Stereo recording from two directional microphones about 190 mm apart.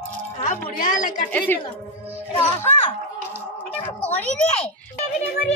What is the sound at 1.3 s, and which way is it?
Speech, 10° left (ahead or behind).